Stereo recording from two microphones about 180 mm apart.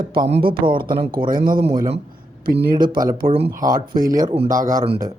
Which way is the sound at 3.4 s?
50° right (ahead or behind).